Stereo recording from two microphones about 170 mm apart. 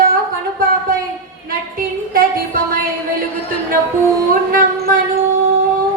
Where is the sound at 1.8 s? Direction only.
55° right (ahead or behind).